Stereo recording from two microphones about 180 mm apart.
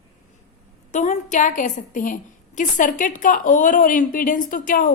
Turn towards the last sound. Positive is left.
turn(degrees=50)  # may be behind; listen again after turning